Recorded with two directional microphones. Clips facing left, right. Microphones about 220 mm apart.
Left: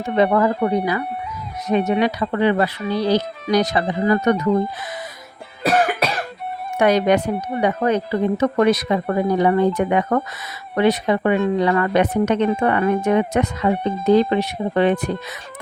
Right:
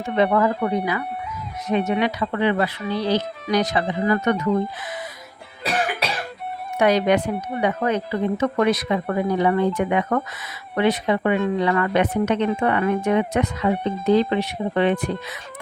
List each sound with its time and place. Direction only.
0.0 s speech: 35° left (ahead or behind)
6.7 s speech: 50° left (ahead or behind)